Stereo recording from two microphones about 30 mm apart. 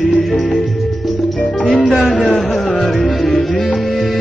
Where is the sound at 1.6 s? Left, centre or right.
Left.